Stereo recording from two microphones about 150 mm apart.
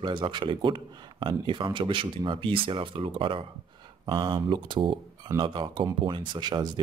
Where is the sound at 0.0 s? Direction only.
35° right (ahead or behind).